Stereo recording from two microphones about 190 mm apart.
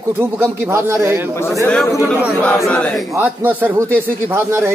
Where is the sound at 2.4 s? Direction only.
5° left (ahead or behind).